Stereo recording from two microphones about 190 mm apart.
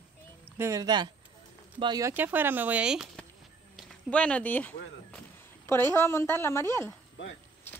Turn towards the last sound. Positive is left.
turn(degrees=15)  # may be behind; listen again after turning